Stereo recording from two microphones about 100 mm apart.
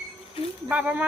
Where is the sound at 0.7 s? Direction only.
15° right (ahead or behind).